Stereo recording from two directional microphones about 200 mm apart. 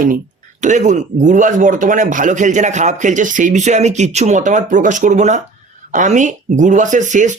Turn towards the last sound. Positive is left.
turn(degrees=-40)  # may be behind; listen again after turning